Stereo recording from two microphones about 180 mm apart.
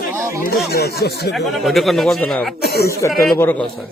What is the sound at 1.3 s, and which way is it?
Speech, centre (ahead or behind).